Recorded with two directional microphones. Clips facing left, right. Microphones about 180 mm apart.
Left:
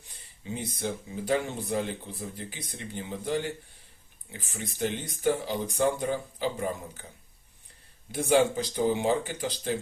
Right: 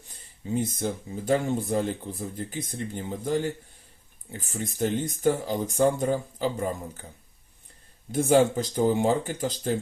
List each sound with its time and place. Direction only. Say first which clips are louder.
0.5 s speech: right 5 dB; 45° right (ahead or behind)
8.1 s speech: right 3 dB; 45° right (ahead or behind)